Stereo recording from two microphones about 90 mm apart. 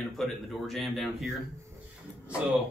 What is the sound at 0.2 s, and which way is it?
Speech, centre (ahead or behind).